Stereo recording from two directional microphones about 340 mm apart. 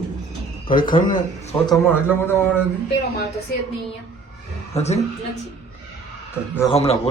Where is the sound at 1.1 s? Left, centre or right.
Centre.